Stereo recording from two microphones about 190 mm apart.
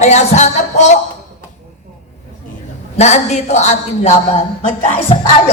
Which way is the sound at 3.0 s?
35° left (ahead or behind).